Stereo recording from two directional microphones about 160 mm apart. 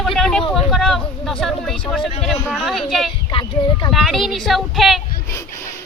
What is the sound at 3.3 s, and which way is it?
Speech, 30° left (ahead or behind).